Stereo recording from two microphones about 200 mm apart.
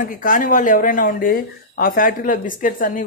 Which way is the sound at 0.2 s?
40° left (ahead or behind).